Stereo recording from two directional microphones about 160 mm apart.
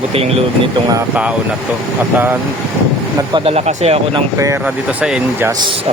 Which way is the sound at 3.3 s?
40° right (ahead or behind).